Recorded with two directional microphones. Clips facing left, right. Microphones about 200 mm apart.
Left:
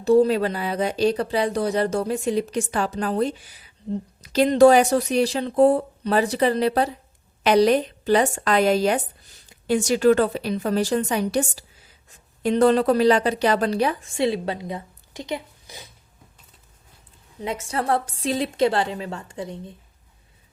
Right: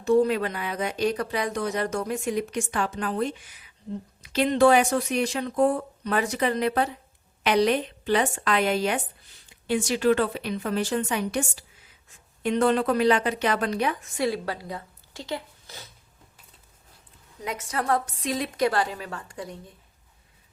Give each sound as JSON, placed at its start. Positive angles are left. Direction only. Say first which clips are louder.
{"t": 0.0, "sound": "speech", "louder": "left 4 dB", "side_deg": 35}
{"t": 17.4, "sound": "a woman's voice", "louder": "left 3 dB", "side_deg": 25}